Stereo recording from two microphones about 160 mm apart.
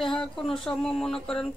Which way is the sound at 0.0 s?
5° left (ahead or behind).